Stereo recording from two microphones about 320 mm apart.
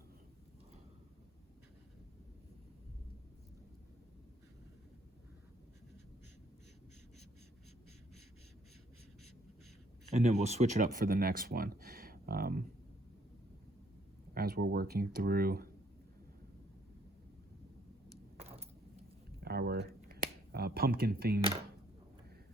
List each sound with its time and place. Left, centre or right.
10.1 s speech: centre
14.3 s speech: right
18.4 s keys jangling: centre
19.5 s speech: right